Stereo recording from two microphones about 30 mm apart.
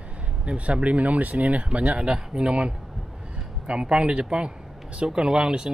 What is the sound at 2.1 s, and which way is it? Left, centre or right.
Speech, right.